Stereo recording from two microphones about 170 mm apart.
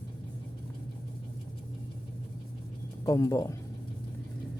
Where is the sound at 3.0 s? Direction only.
20° left (ahead or behind).